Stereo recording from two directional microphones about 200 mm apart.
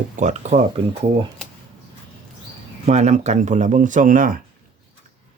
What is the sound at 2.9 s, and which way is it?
Speech, 35° right (ahead or behind).